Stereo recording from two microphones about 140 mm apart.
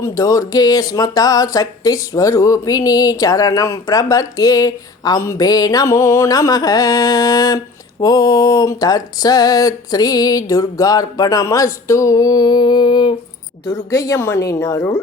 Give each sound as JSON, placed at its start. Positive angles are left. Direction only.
{"t": 0.0, "sound": "speech", "side_deg": 25}